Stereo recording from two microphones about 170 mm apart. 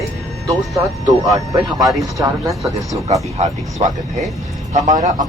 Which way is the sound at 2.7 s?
20° right (ahead or behind).